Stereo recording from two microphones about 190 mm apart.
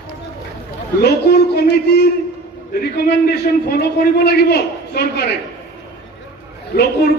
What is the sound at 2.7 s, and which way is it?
A man's voice, 55° left (ahead or behind).